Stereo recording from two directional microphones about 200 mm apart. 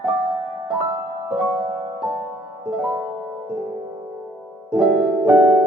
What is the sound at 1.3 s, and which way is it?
Music, 10° right (ahead or behind).